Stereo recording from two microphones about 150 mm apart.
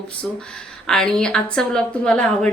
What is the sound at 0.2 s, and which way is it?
A woman's voice, 5° left (ahead or behind).